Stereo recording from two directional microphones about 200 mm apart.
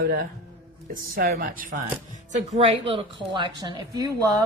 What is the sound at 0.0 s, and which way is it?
Speech, 50° right (ahead or behind).